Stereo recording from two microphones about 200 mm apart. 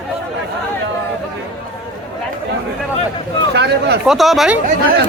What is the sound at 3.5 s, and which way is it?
Speech, 55° right (ahead or behind).